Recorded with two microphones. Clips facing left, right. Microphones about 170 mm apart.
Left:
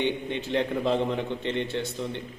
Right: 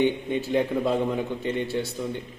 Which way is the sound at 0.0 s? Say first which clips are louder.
Right 4 dB; 10° right (ahead or behind).